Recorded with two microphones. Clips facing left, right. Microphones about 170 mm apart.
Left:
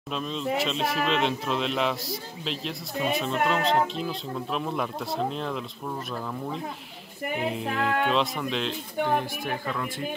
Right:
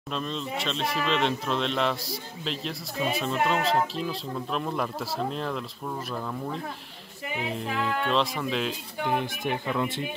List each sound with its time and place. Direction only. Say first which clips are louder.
0.1 s a man's voice: left 3 dB; centre (ahead or behind)
7.4 s a man's voice: left 2 dB; centre (ahead or behind)
9.0 s speech: left 1 dB; 15° right (ahead or behind)